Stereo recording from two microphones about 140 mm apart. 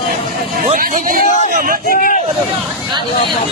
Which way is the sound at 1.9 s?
85° left.